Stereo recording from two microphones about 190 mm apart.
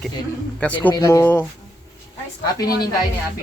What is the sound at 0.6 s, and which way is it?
Speech, 10° left (ahead or behind).